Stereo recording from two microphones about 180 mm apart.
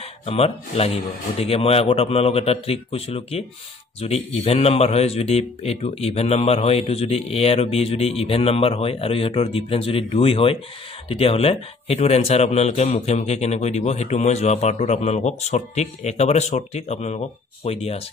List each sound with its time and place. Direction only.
0.3 s a man's voice: 35° left (ahead or behind)